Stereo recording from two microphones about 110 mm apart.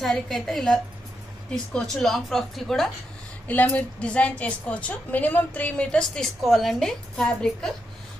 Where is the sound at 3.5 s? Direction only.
15° left (ahead or behind).